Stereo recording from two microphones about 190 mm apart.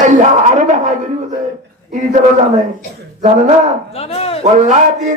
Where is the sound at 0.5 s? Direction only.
40° right (ahead or behind).